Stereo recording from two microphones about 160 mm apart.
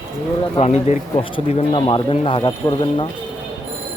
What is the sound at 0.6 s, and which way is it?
Speech, 45° left (ahead or behind).